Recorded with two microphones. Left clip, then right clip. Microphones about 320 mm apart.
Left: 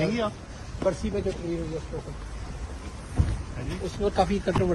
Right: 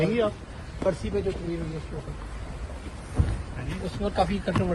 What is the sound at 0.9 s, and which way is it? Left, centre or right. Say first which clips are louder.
Speech: even; left.